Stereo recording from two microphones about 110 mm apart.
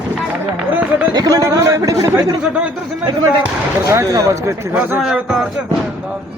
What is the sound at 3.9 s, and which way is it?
Speech, 25° right (ahead or behind).